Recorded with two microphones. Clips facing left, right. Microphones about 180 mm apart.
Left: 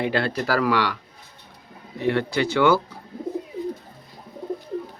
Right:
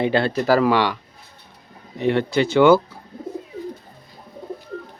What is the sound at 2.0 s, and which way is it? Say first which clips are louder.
Speech: right 3 dB; 20° right (ahead or behind).